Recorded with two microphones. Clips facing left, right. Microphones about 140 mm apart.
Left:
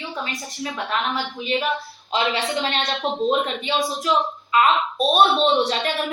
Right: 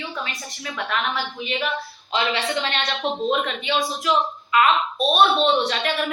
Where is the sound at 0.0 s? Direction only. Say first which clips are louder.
Left 1 dB; 25° left (ahead or behind).